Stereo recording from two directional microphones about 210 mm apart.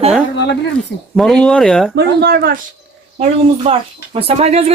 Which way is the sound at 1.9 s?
50° right (ahead or behind).